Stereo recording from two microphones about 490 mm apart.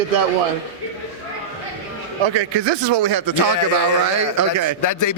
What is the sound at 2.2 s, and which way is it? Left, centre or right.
A man's voice, right.